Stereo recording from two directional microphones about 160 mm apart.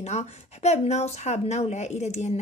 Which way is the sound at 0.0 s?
45° left (ahead or behind).